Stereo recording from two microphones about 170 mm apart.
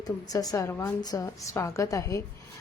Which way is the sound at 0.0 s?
20° left (ahead or behind).